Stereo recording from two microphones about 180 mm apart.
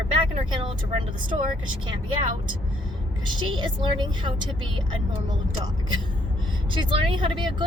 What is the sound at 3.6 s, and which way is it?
Speech, 25° right (ahead or behind).